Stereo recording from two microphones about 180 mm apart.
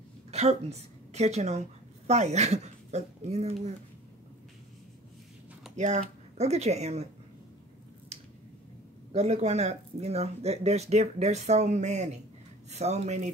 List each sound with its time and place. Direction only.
0.3 s a woman's voice: 35° right (ahead or behind)
5.8 s speech: 40° right (ahead or behind)
9.1 s speech: 40° right (ahead or behind)